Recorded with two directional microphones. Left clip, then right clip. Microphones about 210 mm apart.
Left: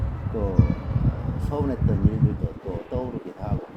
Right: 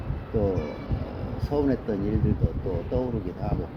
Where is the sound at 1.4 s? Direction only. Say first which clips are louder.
Right 3 dB; 10° left (ahead or behind).